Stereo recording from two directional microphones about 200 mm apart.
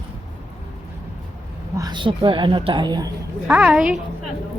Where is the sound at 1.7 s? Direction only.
20° right (ahead or behind).